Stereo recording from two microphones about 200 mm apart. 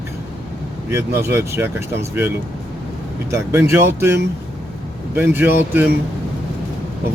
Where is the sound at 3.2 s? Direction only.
15° right (ahead or behind).